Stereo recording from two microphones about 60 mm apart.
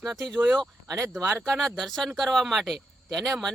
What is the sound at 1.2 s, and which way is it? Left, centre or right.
Speech, right.